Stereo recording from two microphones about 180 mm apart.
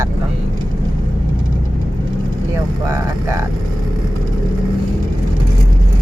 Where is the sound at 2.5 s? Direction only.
15° right (ahead or behind).